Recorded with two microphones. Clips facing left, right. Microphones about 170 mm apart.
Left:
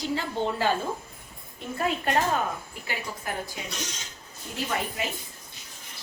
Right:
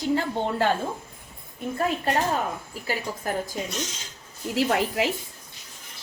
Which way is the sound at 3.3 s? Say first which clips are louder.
Right 6 dB; 40° right (ahead or behind).